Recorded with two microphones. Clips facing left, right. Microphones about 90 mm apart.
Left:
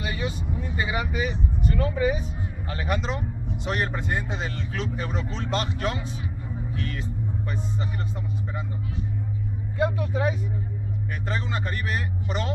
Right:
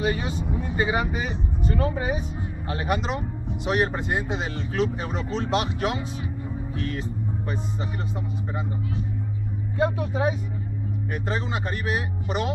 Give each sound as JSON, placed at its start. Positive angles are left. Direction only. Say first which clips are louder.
{"t": 0.0, "sound": "speech", "louder": "right 4 dB", "side_deg": -40}
{"t": 2.7, "sound": "speech", "louder": "right 2 dB", "side_deg": -15}
{"t": 6.7, "sound": "speech", "louder": "right 3 dB", "side_deg": -30}
{"t": 9.8, "sound": "speech", "louder": "right 1 dB", "side_deg": -35}